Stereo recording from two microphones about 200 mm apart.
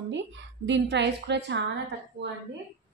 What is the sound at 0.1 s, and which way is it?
A woman's voice, 65° right (ahead or behind).